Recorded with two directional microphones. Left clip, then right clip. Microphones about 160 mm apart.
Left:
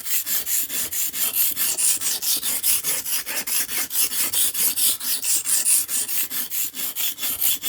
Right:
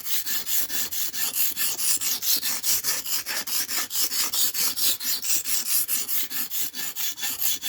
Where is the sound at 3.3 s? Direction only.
15° right (ahead or behind).